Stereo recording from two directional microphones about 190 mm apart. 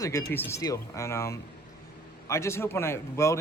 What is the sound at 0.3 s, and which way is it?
Speech, 15° left (ahead or behind).